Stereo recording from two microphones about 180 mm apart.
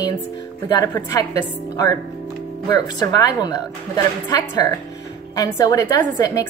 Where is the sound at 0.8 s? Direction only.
20° left (ahead or behind).